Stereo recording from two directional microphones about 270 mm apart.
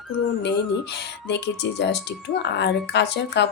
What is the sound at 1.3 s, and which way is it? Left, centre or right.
Speech, left.